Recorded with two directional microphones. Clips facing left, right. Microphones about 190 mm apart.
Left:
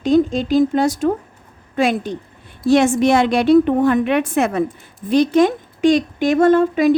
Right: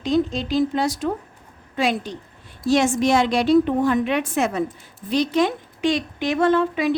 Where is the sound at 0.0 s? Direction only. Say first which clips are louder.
Left 6 dB; 50° left (ahead or behind).